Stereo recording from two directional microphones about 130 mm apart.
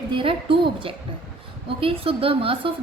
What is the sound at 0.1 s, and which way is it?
A woman's voice, 40° right (ahead or behind).